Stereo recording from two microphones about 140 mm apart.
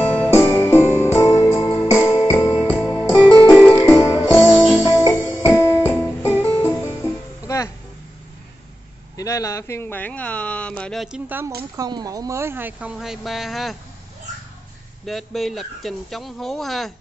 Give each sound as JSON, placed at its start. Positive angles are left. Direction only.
{"t": 0.0, "sound": "music", "side_deg": 10}
{"t": 9.1, "sound": "speech", "side_deg": 25}
{"t": 11.7, "sound": "speech", "side_deg": -25}
{"t": 12.9, "sound": "speech", "side_deg": 0}
{"t": 15.0, "sound": "speech", "side_deg": 0}